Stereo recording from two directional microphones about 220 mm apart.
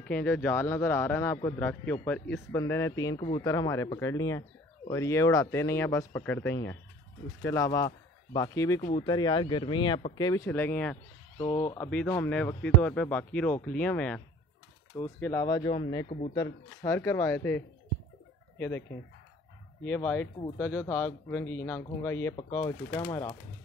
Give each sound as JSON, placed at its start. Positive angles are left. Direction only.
{"t": 0.0, "sound": "speech", "side_deg": 5}
{"t": 16.4, "sound": "speech", "side_deg": 15}